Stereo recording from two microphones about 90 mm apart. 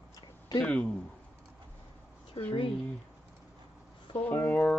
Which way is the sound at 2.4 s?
90° left.